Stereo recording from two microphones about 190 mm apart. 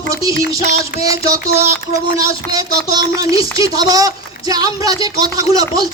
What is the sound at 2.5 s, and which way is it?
A woman's voice, 20° right (ahead or behind).